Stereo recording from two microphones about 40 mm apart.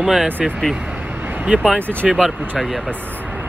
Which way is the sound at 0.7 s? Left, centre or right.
Right.